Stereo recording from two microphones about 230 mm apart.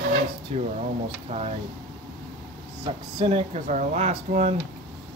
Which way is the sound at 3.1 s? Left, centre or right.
Right.